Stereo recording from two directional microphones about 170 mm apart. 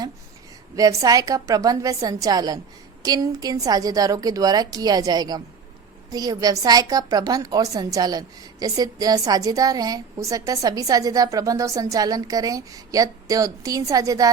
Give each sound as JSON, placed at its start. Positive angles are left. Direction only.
{"t": 0.8, "sound": "a woman's voice", "side_deg": -20}